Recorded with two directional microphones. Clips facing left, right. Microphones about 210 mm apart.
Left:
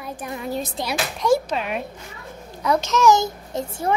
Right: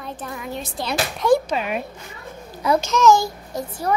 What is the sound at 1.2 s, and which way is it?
Speech, 5° right (ahead or behind).